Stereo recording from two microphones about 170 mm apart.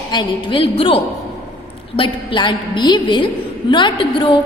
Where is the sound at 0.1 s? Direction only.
30° left (ahead or behind).